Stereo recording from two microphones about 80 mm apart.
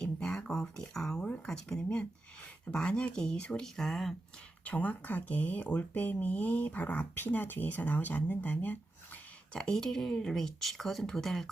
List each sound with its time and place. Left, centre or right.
0.0 s speech: centre
4.6 s speech: centre
9.5 s speech: centre